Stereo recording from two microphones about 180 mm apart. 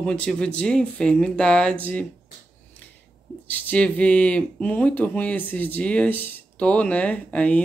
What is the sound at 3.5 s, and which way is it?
Speech, 10° left (ahead or behind).